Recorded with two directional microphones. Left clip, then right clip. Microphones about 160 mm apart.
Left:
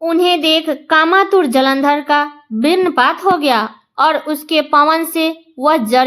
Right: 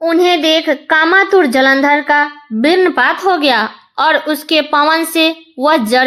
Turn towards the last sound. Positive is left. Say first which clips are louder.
# right 1 dB
turn(degrees=-30)  # may be behind; listen again after turning